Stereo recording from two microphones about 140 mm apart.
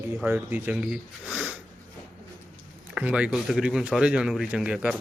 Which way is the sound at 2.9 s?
10° right (ahead or behind).